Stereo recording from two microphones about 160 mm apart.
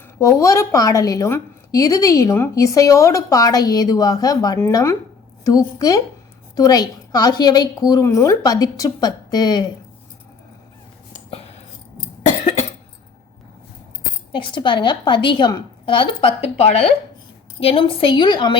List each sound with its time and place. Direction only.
0.2 s a woman's voice: 20° left (ahead or behind)
11.3 s a sound: 40° left (ahead or behind)
12.2 s cough: 45° left (ahead or behind)
14.3 s a woman's voice: 30° left (ahead or behind)